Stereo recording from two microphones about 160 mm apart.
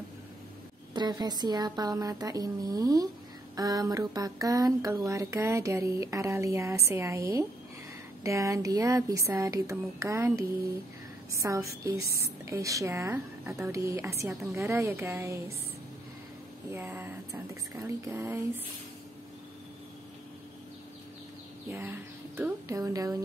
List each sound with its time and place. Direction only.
0.9 s a woman's voice: 25° right (ahead or behind)
16.7 s a woman's voice: 10° right (ahead or behind)
21.6 s a woman's voice: 15° right (ahead or behind)